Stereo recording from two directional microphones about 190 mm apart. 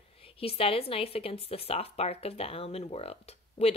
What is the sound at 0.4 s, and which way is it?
Speech, 30° left (ahead or behind).